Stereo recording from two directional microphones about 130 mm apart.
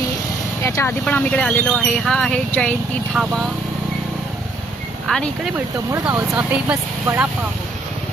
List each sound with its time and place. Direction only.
0.6 s speech: 20° left (ahead or behind)
3.2 s speech: 10° right (ahead or behind)
5.0 s speech: 5° left (ahead or behind)
5.5 s speech: 20° right (ahead or behind)
6.3 s speech: 10° right (ahead or behind)